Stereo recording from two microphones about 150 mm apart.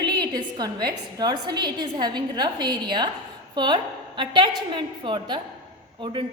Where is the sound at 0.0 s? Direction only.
30° right (ahead or behind).